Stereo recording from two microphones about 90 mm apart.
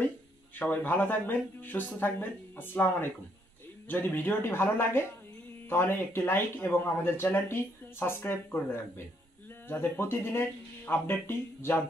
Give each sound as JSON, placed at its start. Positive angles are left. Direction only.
{"t": 0.6, "sound": "speech", "side_deg": 20}